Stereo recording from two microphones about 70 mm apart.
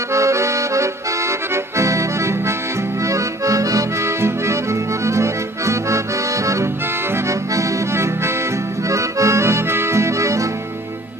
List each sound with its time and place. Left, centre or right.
0.1 s accordion: right